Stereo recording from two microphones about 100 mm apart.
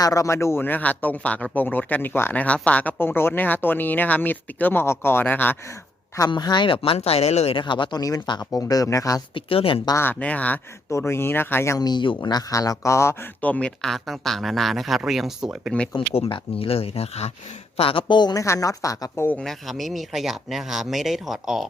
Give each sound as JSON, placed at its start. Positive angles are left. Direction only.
{"t": 0.0, "sound": "speech", "side_deg": 35}
{"t": 6.1, "sound": "speech", "side_deg": 45}
{"t": 7.6, "sound": "speech", "side_deg": 50}
{"t": 9.3, "sound": "speech", "side_deg": 65}
{"t": 10.0, "sound": "speech", "side_deg": 15}
{"t": 10.8, "sound": "speech", "side_deg": 30}
{"t": 11.8, "sound": "speech", "side_deg": 50}
{"t": 13.4, "sound": "speech", "side_deg": 15}
{"t": 15.7, "sound": "speech", "side_deg": 10}
{"t": 16.0, "sound": "speech", "side_deg": 70}
{"t": 17.7, "sound": "speech", "side_deg": 65}
{"t": 18.3, "sound": "speech", "side_deg": 30}
{"t": 19.4, "sound": "speech", "side_deg": 0}